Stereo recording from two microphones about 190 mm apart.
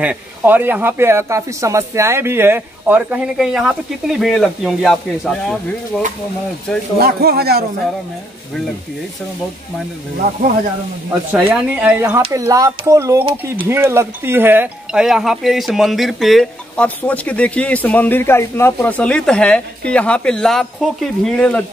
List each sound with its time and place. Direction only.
0.0 s speech: 10° right (ahead or behind)
7.0 s a man's voice: 55° right (ahead or behind)
11.3 s speech: 5° right (ahead or behind)
12.3 s speech: 15° right (ahead or behind); by 21.6 s 5° left (ahead or behind)